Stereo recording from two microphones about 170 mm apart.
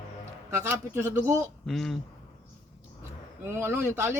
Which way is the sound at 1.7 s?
Centre (ahead or behind).